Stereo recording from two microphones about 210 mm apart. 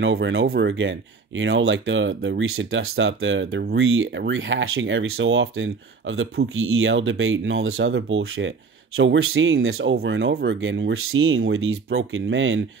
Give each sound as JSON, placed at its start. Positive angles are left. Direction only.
{"t": 0.0, "sound": "speech", "side_deg": -65}